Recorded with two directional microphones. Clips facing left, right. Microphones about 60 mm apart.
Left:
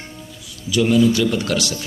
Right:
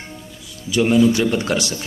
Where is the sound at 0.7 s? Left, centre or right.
Right.